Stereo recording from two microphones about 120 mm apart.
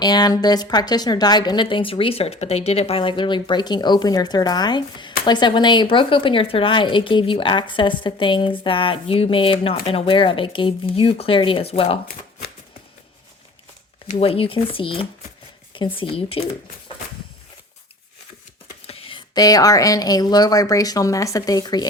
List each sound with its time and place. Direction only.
0.0 s speech: 35° left (ahead or behind); by 11.9 s 55° left (ahead or behind)
14.1 s speech: 55° left (ahead or behind)
18.9 s a sound: 50° left (ahead or behind)
19.3 s a woman's voice: 30° left (ahead or behind)